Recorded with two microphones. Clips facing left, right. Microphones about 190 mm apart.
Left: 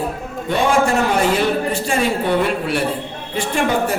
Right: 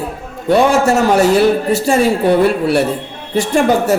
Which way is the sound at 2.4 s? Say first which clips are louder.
Right 7 dB; 40° right (ahead or behind).